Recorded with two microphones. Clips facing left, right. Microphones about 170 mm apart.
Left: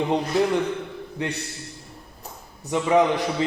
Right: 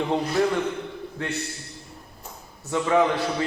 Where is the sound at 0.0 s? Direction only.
20° left (ahead or behind).